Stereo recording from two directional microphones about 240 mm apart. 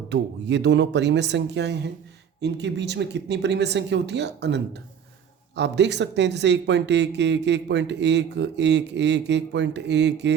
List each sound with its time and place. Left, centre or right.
0.1 s speech: right